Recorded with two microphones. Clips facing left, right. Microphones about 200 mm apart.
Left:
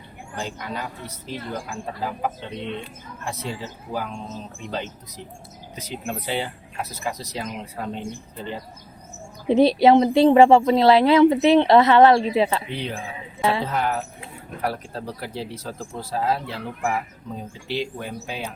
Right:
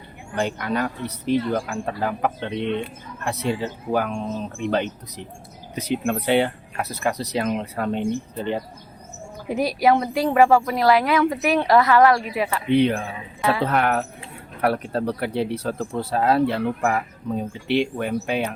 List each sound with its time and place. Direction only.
0.3 s speech: 65° right (ahead or behind)
9.5 s speech: 25° left (ahead or behind)
12.7 s speech: 60° right (ahead or behind)
13.4 s speech: 25° left (ahead or behind)
13.7 s speech: 65° right (ahead or behind)